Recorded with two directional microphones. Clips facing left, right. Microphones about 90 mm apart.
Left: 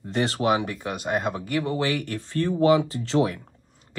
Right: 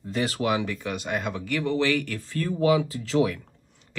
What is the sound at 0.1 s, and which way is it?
Speech, 40° left (ahead or behind).